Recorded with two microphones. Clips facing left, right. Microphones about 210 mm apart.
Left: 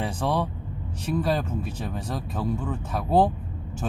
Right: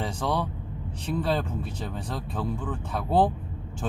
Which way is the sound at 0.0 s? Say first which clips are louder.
Left 2 dB; 10° left (ahead or behind).